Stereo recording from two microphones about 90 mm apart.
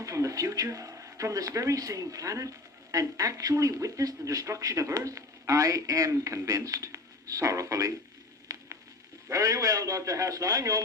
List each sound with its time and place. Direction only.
0.0 s speech: 35° right (ahead or behind)
9.3 s speech: 40° right (ahead or behind)